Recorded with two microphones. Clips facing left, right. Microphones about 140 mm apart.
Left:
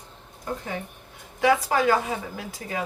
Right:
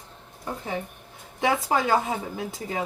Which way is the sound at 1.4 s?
25° right (ahead or behind).